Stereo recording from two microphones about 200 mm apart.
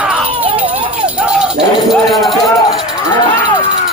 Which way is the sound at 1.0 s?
5° right (ahead or behind).